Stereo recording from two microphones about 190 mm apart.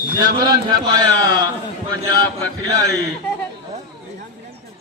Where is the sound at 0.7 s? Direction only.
20° right (ahead or behind).